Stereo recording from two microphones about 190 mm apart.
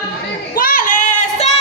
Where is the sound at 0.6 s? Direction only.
45° left (ahead or behind).